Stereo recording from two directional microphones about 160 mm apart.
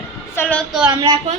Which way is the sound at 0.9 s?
25° right (ahead or behind).